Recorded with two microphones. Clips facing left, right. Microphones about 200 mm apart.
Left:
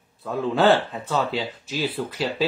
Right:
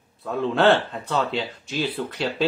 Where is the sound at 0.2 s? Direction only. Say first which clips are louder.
Even; centre (ahead or behind).